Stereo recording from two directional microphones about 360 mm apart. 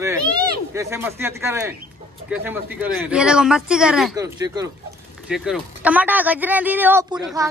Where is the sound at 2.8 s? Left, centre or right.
Centre.